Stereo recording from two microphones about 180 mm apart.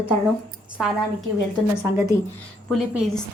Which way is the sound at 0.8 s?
Centre (ahead or behind).